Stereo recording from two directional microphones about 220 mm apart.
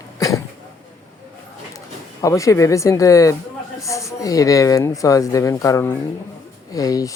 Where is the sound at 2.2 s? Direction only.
15° left (ahead or behind).